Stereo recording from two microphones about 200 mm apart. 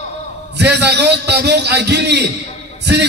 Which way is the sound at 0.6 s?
55° right (ahead or behind).